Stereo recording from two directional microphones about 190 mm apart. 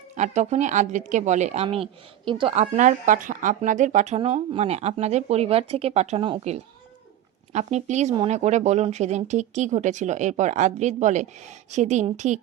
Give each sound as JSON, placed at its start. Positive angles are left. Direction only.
{"t": 0.2, "sound": "a woman's voice", "side_deg": -40}